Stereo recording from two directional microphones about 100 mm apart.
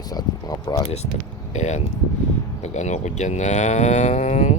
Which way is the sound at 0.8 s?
90° left.